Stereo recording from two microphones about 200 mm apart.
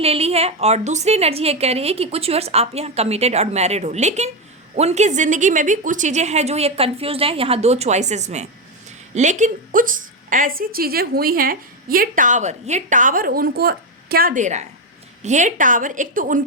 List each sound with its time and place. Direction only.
0.0 s a woman's voice: 30° right (ahead or behind)